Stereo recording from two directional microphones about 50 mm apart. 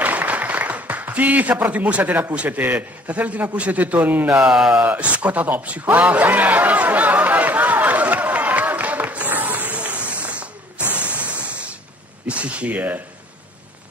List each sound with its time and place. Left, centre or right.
0.0 s applause: right
1.6 s a man's voice: right
4.4 s speech: centre
4.8 s a man's voice: right
6.2 s a sound: right
10.8 s spray: left
11.1 s a sound: right
12.3 s speech: right